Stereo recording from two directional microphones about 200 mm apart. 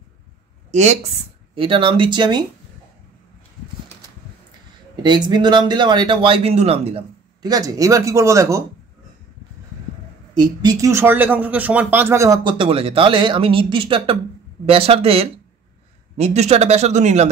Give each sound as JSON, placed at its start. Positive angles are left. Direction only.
{"t": 0.7, "sound": "speech", "side_deg": -35}
{"t": 5.0, "sound": "speech", "side_deg": -20}
{"t": 7.4, "sound": "speech", "side_deg": -20}
{"t": 10.3, "sound": "speech", "side_deg": -20}